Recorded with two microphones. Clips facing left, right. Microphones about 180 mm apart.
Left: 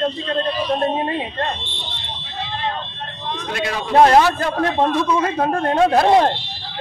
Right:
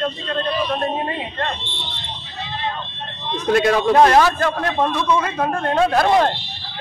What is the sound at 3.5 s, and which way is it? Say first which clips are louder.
Speech: right 9 dB; 50° right (ahead or behind).